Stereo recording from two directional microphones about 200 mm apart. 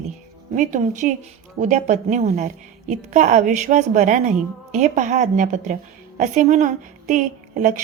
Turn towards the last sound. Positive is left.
turn(degrees=-40)  # may be behind; listen again after turning